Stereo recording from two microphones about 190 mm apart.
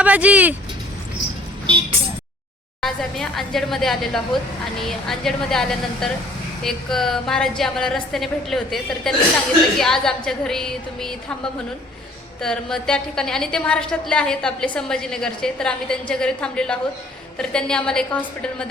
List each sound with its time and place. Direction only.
0.0 s speech: 5° right (ahead or behind)
1.6 s vehicle: 25° right (ahead or behind)
2.8 s a woman's voice: centre (ahead or behind)
12.4 s a woman's voice: 5° left (ahead or behind)